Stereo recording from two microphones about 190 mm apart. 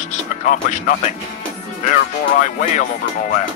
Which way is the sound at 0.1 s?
40° left (ahead or behind).